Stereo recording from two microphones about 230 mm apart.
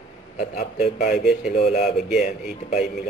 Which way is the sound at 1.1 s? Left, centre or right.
Centre.